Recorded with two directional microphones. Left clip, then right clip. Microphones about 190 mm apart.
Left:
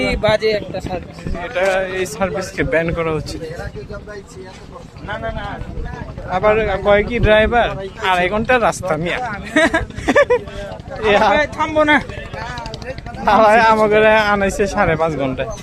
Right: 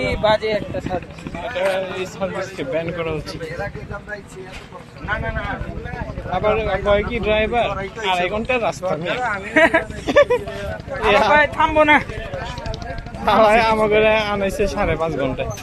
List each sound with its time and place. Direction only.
0.0 s speech: 70° left (ahead or behind)
1.5 s speech: 35° left (ahead or behind)
6.3 s speech: 30° left (ahead or behind)
9.6 s a man's voice: 65° left (ahead or behind)
10.1 s speech: 35° left (ahead or behind)
11.3 s a man's voice: 60° left (ahead or behind)
13.2 s speech: 15° left (ahead or behind)